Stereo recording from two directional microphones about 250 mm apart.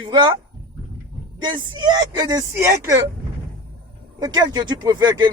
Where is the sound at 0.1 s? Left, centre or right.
Centre.